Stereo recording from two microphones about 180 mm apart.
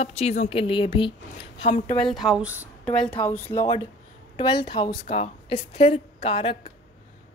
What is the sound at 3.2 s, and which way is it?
Speech, 10° left (ahead or behind).